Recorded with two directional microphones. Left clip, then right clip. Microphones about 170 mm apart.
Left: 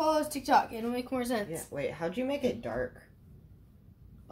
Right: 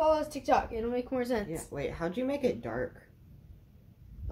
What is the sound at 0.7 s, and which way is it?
A woman's voice, 20° right (ahead or behind).